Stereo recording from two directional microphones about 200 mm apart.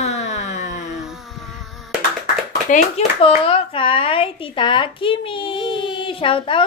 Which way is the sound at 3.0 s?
30° left (ahead or behind).